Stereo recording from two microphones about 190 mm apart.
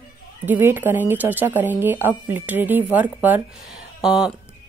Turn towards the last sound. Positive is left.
turn(degrees=0)  # may be behind; listen again after turning